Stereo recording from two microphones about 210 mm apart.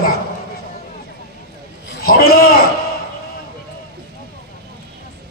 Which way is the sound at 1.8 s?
45° left (ahead or behind).